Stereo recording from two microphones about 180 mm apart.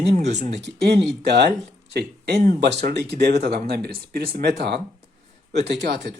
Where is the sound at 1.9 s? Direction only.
65° right (ahead or behind).